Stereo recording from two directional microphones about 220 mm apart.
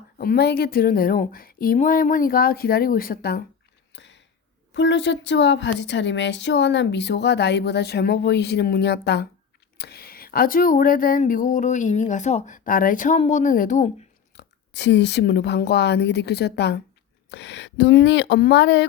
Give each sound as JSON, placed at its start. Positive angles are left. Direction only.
{"t": 0.2, "sound": "speech", "side_deg": 45}
{"t": 3.9, "sound": "a sound", "side_deg": 55}
{"t": 4.7, "sound": "speech", "side_deg": 55}
{"t": 14.3, "sound": "speech", "side_deg": 50}